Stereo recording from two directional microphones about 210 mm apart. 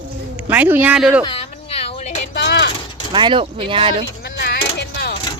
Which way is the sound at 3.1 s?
20° right (ahead or behind).